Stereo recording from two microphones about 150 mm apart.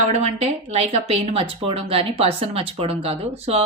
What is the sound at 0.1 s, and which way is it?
Speech, 45° right (ahead or behind).